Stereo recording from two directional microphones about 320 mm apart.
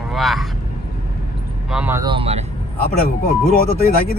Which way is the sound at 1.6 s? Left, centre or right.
Centre.